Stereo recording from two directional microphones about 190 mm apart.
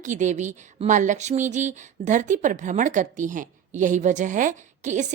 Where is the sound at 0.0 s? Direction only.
40° right (ahead or behind).